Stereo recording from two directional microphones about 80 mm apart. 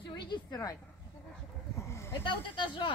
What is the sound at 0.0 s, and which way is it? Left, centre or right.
Speech, left.